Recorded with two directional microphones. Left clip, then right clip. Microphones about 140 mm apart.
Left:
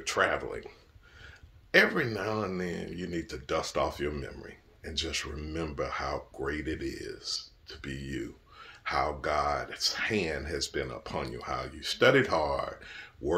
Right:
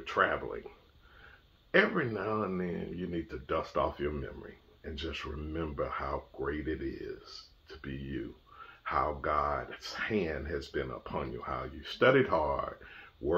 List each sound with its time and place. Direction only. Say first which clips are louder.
0.0 s speech: left 2 dB; 15° left (ahead or behind)
1.7 s speech: left 3 dB; 15° left (ahead or behind)